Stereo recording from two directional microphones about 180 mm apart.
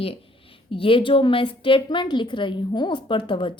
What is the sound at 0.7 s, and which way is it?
A woman's voice, 30° left (ahead or behind).